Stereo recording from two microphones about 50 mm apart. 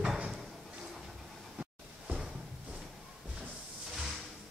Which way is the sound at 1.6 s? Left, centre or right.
Centre.